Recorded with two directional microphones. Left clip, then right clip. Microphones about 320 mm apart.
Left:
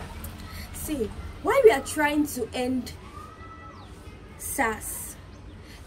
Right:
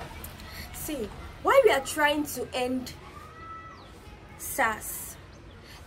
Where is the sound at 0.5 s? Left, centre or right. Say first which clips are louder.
Left 2 dB; centre.